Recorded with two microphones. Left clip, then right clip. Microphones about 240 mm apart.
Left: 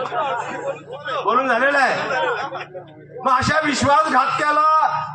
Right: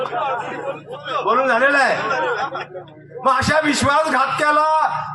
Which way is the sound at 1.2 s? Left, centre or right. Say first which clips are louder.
Right 2 dB; right.